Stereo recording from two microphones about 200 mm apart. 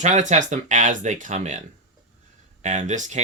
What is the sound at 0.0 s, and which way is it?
Speech, 35° right (ahead or behind).